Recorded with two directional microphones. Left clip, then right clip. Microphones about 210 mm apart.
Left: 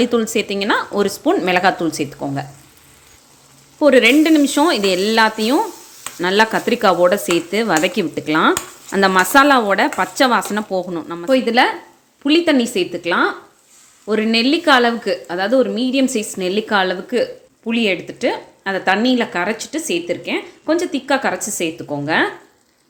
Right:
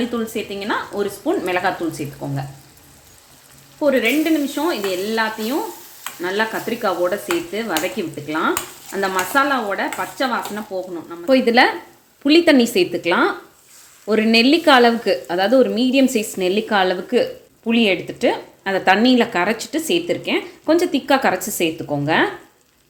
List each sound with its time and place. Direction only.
0.0 s speech: 45° left (ahead or behind)
3.8 s speech: 45° left (ahead or behind)
11.3 s speech: 5° left (ahead or behind)